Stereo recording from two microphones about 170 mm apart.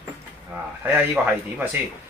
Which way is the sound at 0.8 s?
10° right (ahead or behind).